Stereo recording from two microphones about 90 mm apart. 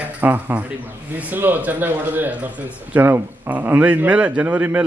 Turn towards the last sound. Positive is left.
turn(degrees=-20)  # may be behind; listen again after turning